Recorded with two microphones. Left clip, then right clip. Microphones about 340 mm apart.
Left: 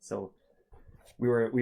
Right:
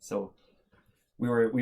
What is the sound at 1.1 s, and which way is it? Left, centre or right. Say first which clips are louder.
Speech: left 2 dB; left.